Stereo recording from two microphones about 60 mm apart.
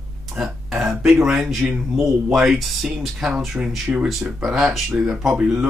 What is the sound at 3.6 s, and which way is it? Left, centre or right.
Speech, right.